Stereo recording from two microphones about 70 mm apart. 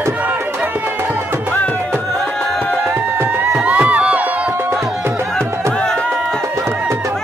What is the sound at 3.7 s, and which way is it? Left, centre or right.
Music, right.